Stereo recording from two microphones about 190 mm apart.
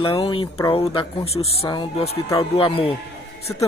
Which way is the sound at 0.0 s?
30° left (ahead or behind).